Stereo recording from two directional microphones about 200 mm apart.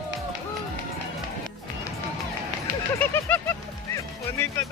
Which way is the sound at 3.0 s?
10° left (ahead or behind).